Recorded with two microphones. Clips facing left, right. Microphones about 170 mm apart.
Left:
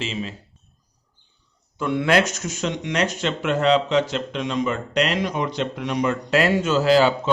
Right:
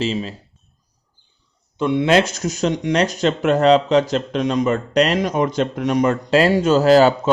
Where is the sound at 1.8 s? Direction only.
20° right (ahead or behind); by 6.1 s 45° right (ahead or behind).